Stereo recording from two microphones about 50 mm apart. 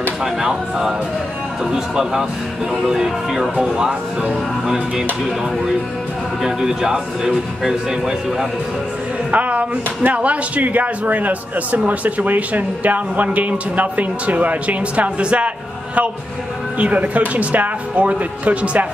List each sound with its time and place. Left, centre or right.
0.2 s a man's voice: centre
6.4 s a man's voice: centre
9.3 s speech: right